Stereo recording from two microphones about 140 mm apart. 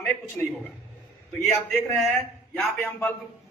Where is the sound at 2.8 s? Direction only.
20° left (ahead or behind).